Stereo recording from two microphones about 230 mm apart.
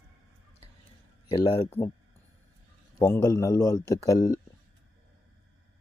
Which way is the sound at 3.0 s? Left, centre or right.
Centre.